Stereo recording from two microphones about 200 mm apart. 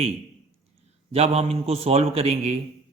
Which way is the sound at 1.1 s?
30° right (ahead or behind).